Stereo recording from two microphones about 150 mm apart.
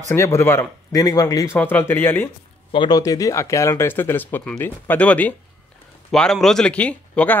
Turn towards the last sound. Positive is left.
turn(degrees=10)  # may be behind; listen again after turning